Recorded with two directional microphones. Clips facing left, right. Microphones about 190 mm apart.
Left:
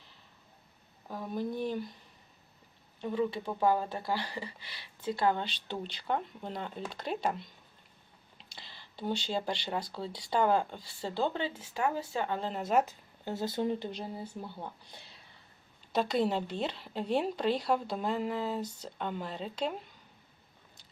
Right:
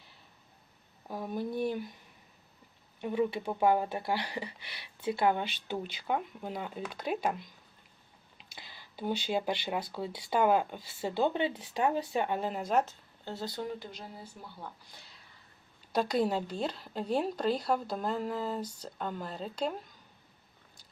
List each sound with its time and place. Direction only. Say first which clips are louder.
1.0 s speech: even; 10° right (ahead or behind)
3.0 s speech: right 1 dB; 15° right (ahead or behind)
12.6 s speech: left 4 dB; 10° left (ahead or behind)
16.0 s speech: even; 5° right (ahead or behind)